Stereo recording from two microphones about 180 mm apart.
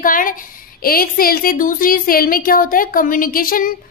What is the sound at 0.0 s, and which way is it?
A woman's voice, 50° left (ahead or behind).